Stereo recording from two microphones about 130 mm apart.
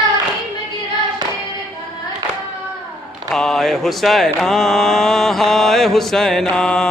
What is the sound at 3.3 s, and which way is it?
Mantra, 5° left (ahead or behind).